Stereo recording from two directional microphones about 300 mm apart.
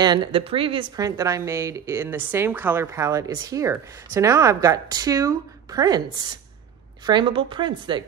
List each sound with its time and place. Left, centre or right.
0.0 s a woman's voice: centre